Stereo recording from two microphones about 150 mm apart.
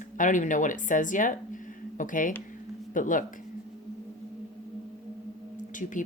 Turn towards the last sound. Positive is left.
turn(degrees=60)  # may be behind; listen again after turning